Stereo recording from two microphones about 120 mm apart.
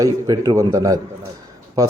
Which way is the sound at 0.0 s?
30° right (ahead or behind).